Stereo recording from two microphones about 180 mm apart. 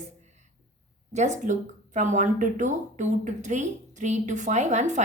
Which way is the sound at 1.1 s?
40° right (ahead or behind).